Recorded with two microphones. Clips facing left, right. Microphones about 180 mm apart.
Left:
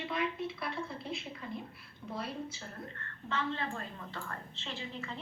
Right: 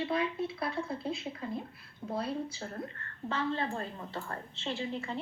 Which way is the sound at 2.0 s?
30° right (ahead or behind).